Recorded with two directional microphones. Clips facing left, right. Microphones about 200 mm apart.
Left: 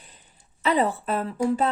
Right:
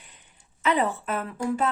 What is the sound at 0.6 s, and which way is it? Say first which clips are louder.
Speech: left 2 dB; 35° left (ahead or behind).